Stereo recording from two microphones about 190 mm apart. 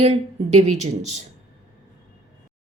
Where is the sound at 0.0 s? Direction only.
35° right (ahead or behind).